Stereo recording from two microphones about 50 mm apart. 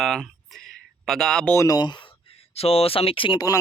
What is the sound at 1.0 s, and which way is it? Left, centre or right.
Speech, centre.